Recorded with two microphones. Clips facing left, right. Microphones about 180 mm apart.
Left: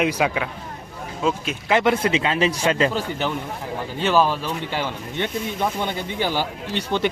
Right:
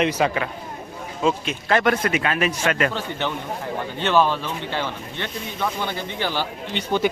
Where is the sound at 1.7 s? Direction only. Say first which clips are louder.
Left 1 dB; 15° left (ahead or behind).